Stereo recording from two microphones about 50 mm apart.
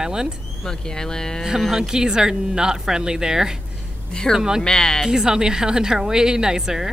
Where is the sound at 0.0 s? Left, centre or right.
Centre.